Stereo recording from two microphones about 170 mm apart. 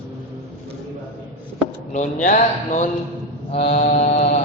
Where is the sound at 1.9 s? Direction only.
45° left (ahead or behind).